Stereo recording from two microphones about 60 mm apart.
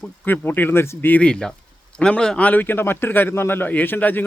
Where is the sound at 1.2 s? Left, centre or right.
Centre.